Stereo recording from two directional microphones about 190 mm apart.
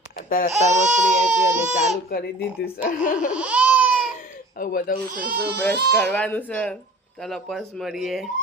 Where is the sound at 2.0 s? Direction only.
50° left (ahead or behind).